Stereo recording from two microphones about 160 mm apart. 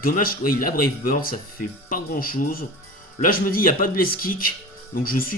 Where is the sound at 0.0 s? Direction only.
65° left (ahead or behind).